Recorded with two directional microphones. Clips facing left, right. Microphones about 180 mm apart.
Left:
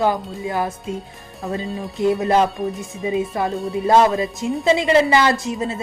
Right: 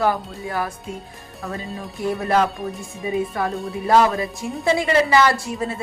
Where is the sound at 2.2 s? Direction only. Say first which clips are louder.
Left 3 dB; 25° left (ahead or behind).